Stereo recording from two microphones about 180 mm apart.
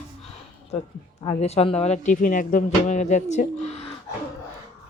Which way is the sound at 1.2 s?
35° left (ahead or behind).